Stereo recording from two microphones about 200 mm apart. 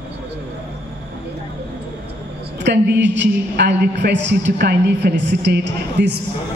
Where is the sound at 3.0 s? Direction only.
65° right (ahead or behind).